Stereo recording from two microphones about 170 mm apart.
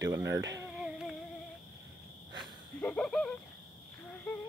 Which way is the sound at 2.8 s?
5° left (ahead or behind).